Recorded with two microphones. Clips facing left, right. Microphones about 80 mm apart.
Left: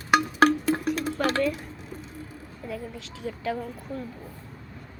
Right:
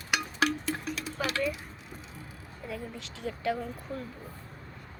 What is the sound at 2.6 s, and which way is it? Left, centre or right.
A woman's voice, centre.